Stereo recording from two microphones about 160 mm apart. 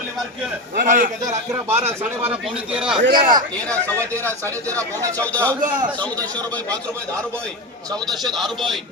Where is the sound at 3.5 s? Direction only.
5° left (ahead or behind).